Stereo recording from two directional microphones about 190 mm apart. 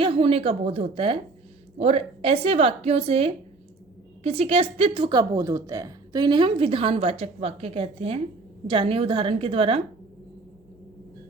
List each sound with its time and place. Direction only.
0.0 s a woman's voice: 30° right (ahead or behind)